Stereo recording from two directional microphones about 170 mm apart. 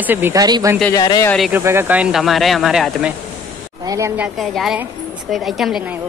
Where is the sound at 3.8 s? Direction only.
15° right (ahead or behind); by 5.8 s centre (ahead or behind).